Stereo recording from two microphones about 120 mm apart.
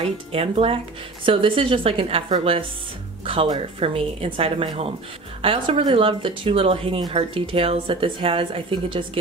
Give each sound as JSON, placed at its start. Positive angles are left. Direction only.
{"t": 0.0, "sound": "speech", "side_deg": -50}
{"t": 3.8, "sound": "speech", "side_deg": -50}